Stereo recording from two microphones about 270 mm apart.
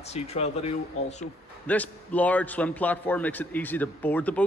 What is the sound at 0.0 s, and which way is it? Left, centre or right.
Speech, left.